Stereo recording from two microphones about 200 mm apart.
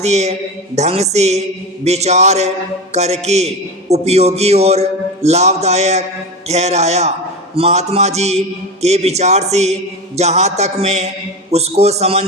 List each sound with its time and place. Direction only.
0.0 s a man's voice: 35° right (ahead or behind)